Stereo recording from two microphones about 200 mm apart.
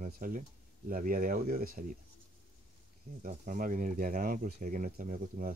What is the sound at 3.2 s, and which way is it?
Speech, 40° right (ahead or behind).